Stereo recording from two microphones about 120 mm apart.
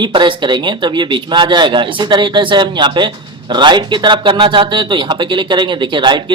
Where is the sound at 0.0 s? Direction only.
40° right (ahead or behind).